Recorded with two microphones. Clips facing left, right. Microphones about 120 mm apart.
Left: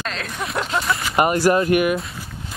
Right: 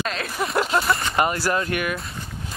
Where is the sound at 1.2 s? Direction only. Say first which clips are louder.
Left 9 dB; 20° left (ahead or behind).